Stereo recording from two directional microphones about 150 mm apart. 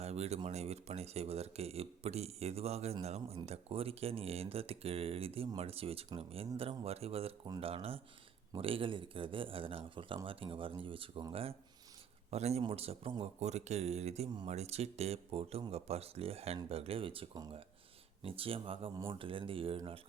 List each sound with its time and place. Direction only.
0.0 s a sound: 45° right (ahead or behind)
0.4 s speech: 45° right (ahead or behind)
13.4 s speech: 50° right (ahead or behind)